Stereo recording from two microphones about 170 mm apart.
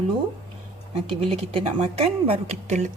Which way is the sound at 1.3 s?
35° right (ahead or behind).